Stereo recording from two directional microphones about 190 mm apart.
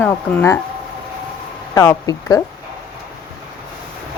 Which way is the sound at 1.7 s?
15° left (ahead or behind).